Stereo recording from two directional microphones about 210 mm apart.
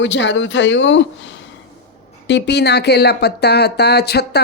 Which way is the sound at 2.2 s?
55° left (ahead or behind).